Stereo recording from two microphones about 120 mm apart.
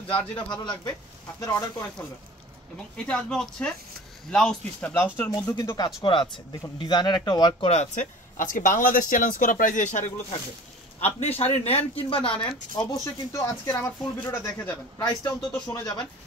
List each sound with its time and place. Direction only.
0.1 s speech: 10° left (ahead or behind)
0.5 s speech: 35° left (ahead or behind)
3.1 s speech: 5° left (ahead or behind)
4.9 s speech: 15° left (ahead or behind)
6.0 s speech: 40° left (ahead or behind)
7.6 s speech: 65° left (ahead or behind); by 10.1 s 90° left
11.0 s speech: 60° left (ahead or behind)
12.7 s speech: 30° left (ahead or behind)
15.0 s speech: 30° left (ahead or behind)